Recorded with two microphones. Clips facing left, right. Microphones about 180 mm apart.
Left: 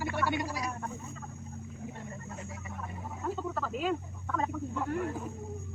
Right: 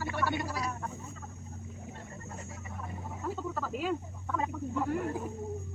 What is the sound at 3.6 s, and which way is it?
Speech, 10° right (ahead or behind).